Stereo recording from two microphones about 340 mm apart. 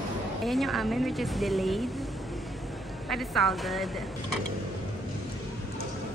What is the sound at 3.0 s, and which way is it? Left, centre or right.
Speech, centre.